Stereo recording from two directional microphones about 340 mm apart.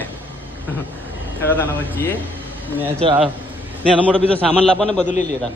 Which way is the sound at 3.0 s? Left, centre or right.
Centre.